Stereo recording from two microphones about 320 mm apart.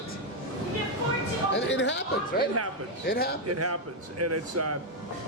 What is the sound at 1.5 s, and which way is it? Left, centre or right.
A man's voice, left.